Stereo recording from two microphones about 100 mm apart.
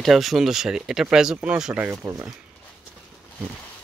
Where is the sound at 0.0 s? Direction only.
Centre (ahead or behind).